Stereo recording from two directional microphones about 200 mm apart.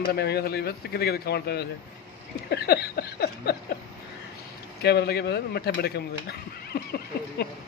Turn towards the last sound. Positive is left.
turn(degrees=55)  # may be behind; listen again after turning